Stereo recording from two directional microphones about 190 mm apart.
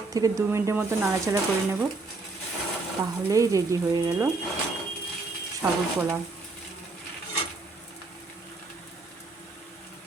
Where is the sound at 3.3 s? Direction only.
15° right (ahead or behind).